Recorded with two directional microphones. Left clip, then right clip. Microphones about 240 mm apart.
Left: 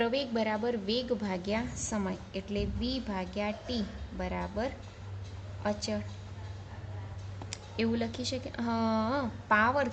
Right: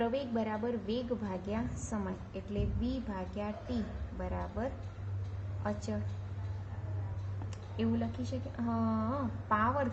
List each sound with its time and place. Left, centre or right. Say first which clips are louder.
0.0 s a woman's voice: left 4 dB; left
7.8 s a woman's voice: left 4 dB; left